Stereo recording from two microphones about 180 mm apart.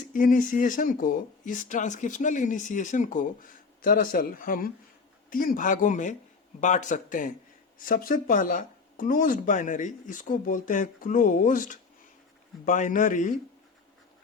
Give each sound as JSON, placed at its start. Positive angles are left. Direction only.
{"t": 0.1, "sound": "speech", "side_deg": 50}